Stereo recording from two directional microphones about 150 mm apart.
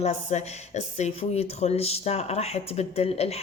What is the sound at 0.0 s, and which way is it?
Speech, 50° left (ahead or behind).